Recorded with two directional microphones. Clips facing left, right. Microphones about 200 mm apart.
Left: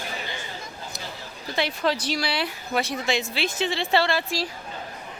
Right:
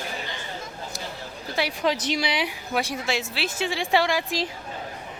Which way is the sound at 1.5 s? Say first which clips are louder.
Even; 10° right (ahead or behind).